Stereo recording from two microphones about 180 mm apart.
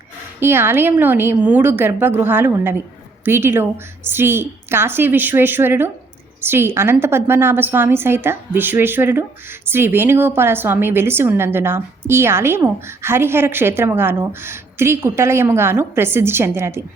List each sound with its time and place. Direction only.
0.3 s a woman's voice: 15° right (ahead or behind)